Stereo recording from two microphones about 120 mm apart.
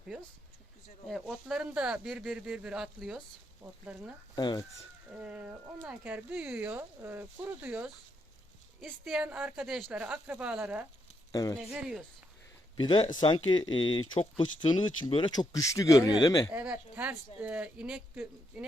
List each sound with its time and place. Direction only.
1.3 s speech: 5° right (ahead or behind)
4.4 s speech: 35° left (ahead or behind)
5.2 s speech: 10° right (ahead or behind)
11.3 s speech: 30° left (ahead or behind)
11.7 s speech: 5° right (ahead or behind)
12.7 s speech: 45° left (ahead or behind)
16.5 s speech: 10° right (ahead or behind)